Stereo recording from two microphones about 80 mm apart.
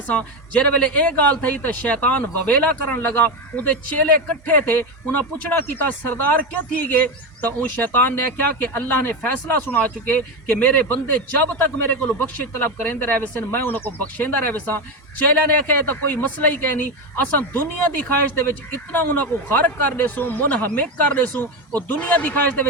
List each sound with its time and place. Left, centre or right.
0.1 s a man's voice: centre
15.9 s a man's voice: left